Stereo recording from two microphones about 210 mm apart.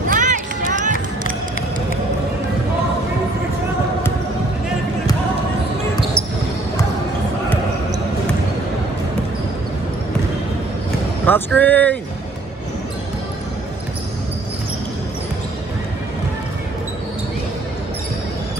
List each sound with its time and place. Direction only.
0.1 s run: 40° right (ahead or behind)
11.2 s speech: 10° left (ahead or behind)